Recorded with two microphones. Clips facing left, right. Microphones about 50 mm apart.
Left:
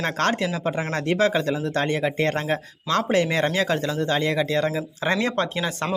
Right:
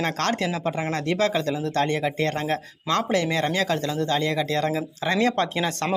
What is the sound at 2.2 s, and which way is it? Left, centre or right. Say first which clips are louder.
Speech: left 1 dB; left.